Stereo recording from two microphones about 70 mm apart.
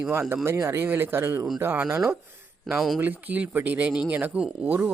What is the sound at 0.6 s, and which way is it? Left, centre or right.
Speech, right.